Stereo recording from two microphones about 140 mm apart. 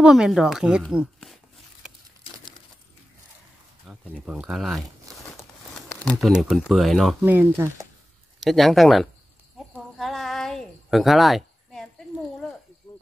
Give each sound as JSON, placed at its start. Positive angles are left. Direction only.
{"t": 0.0, "sound": "speech", "side_deg": -5}
{"t": 4.1, "sound": "speech", "side_deg": -5}
{"t": 5.1, "sound": "crumpling", "side_deg": -25}
{"t": 5.4, "sound": "speech", "side_deg": 0}
{"t": 7.2, "sound": "speech", "side_deg": -15}
{"t": 8.4, "sound": "speech", "side_deg": 0}
{"t": 9.9, "sound": "a sound", "side_deg": 0}
{"t": 12.9, "sound": "cricket", "side_deg": 35}